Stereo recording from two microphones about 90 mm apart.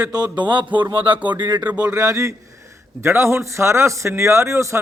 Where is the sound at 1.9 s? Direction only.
35° right (ahead or behind).